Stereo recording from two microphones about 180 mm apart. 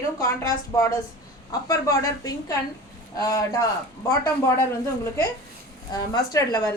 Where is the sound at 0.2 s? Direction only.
15° left (ahead or behind).